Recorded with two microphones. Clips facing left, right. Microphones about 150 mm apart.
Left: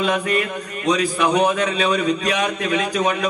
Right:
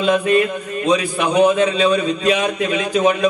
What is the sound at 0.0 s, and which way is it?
A man's voice, 25° right (ahead or behind).